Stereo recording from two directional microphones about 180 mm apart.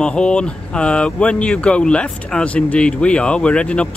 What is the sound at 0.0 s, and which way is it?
Speech, 5° left (ahead or behind).